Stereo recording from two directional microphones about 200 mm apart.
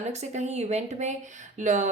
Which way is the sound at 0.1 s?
35° right (ahead or behind).